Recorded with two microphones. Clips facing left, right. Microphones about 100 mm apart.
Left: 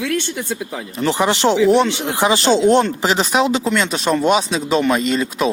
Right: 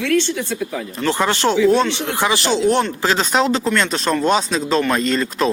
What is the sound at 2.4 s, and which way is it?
Speech, 30° left (ahead or behind).